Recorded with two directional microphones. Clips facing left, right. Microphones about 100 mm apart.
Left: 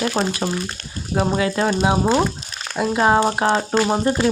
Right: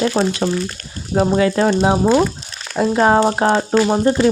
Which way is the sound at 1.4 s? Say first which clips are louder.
Right 4 dB; 35° right (ahead or behind).